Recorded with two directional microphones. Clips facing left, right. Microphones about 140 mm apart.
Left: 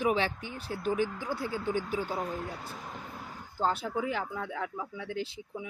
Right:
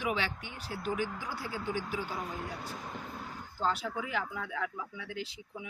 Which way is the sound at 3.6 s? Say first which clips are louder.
Left 3 dB; 35° left (ahead or behind).